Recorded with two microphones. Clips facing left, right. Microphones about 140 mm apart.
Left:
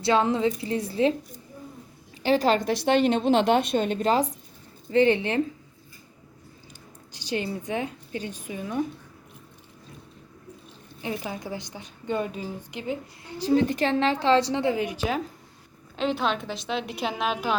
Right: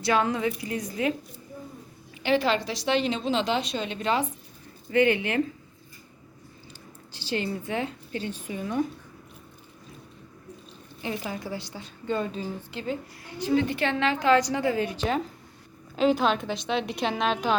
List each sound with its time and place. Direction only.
0.0 s a woman's voice: 25° left (ahead or behind)
2.2 s a woman's voice: 40° left (ahead or behind)
4.9 s a woman's voice: 30° left (ahead or behind)
7.1 s a woman's voice: 15° left (ahead or behind)
11.0 s a woman's voice: 15° left (ahead or behind)
13.4 s a woman's voice: 35° left (ahead or behind); by 17.6 s 5° left (ahead or behind)